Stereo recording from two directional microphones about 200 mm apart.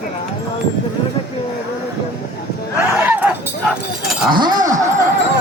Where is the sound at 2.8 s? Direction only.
10° right (ahead or behind).